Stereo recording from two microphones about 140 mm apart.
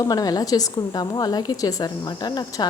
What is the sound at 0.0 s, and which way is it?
Speech, 25° left (ahead or behind).